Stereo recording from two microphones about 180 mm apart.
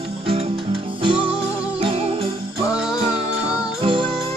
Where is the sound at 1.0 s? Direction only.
30° right (ahead or behind).